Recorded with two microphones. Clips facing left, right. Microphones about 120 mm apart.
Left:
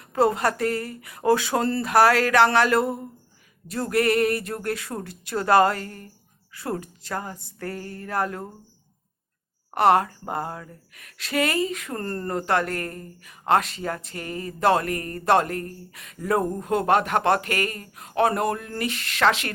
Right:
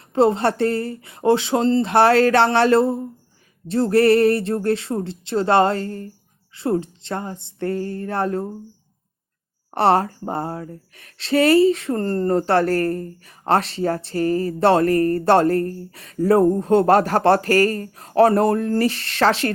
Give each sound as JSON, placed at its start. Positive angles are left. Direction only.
{"t": 0.0, "sound": "speech", "side_deg": -25}
{"t": 9.7, "sound": "a woman's voice", "side_deg": -30}